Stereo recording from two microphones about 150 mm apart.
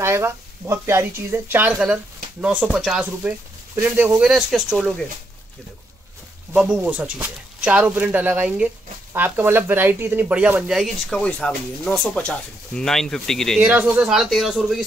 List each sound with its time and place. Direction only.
0.0 s speech: 15° right (ahead or behind); by 4.9 s centre (ahead or behind)
6.5 s speech: 5° right (ahead or behind)
13.6 s speech: 10° right (ahead or behind)